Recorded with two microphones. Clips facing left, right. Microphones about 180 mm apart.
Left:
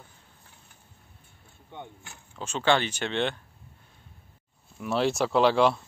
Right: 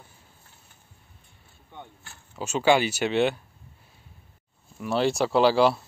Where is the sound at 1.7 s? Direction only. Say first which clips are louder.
Left 2 dB; 20° left (ahead or behind).